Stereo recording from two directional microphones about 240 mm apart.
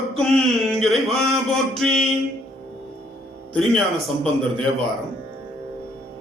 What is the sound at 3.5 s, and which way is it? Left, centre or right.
Speech, centre.